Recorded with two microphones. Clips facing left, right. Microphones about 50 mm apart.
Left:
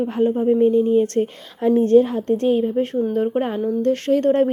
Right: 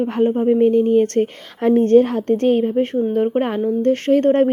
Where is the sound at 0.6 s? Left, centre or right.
Right.